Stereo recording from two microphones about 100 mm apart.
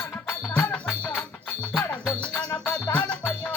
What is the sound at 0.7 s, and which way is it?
Music, 10° left (ahead or behind).